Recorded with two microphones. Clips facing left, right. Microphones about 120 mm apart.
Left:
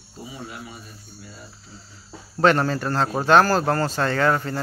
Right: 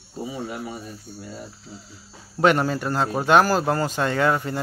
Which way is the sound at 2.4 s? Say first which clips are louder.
Even; 10° right (ahead or behind).